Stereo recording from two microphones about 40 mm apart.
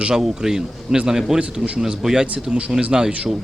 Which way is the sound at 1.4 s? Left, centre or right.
Right.